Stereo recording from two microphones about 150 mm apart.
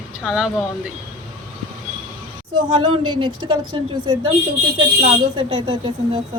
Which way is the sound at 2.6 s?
40° right (ahead or behind).